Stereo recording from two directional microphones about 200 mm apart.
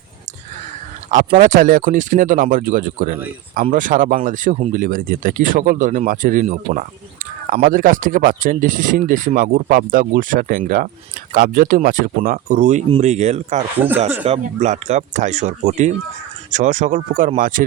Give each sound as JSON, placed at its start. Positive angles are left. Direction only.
{"t": 1.4, "sound": "speech", "side_deg": -40}